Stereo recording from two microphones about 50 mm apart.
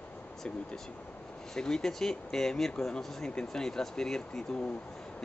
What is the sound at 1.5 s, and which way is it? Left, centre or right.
Speech, centre.